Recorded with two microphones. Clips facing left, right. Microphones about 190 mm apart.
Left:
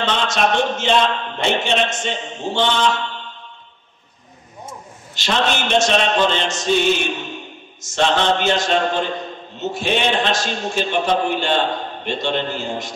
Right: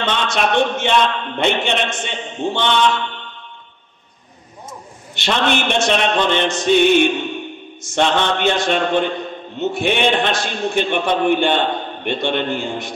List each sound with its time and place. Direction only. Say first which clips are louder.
0.0 s a man's voice: even; 60° right (ahead or behind)
5.1 s a man's voice: right 2 dB; 60° right (ahead or behind)